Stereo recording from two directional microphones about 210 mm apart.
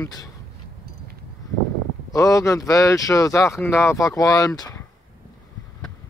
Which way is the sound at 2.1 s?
15° left (ahead or behind).